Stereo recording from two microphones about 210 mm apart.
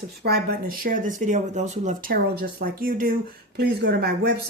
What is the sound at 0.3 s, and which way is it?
A woman's voice, 45° right (ahead or behind).